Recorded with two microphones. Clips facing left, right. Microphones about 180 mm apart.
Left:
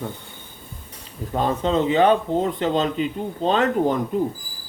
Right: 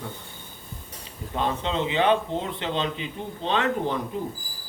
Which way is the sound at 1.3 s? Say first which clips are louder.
Left 6 dB; 45° left (ahead or behind).